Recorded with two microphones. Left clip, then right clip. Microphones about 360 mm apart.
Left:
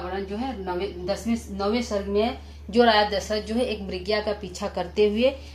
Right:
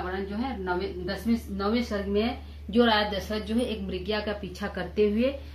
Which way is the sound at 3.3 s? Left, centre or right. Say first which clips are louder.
Left 4 dB; left.